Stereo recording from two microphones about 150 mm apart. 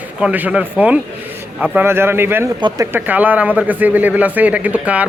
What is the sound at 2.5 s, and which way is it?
Speech, 30° right (ahead or behind).